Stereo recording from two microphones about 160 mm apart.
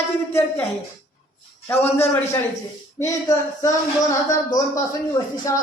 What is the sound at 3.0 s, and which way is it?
A man's voice, 20° left (ahead or behind).